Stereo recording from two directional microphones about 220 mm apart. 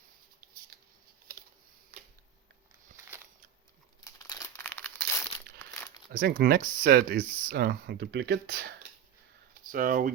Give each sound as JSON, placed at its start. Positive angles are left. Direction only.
{"t": 0.7, "sound": "scissors", "side_deg": -45}
{"t": 4.0, "sound": "crumpling", "side_deg": 15}
{"t": 6.1, "sound": "speech", "side_deg": -45}
{"t": 9.7, "sound": "speech", "side_deg": -40}